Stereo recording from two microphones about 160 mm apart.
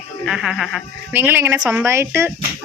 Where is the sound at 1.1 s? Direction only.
10° right (ahead or behind).